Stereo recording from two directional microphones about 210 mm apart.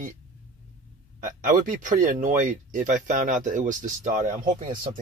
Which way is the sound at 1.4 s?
40° right (ahead or behind).